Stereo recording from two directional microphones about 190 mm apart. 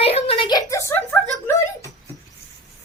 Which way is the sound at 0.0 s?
30° left (ahead or behind).